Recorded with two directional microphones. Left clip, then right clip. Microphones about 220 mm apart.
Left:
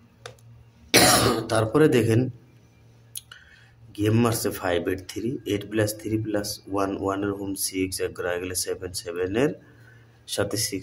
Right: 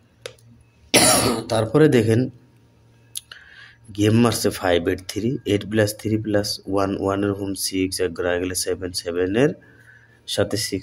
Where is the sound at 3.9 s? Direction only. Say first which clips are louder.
Right 5 dB; 25° right (ahead or behind).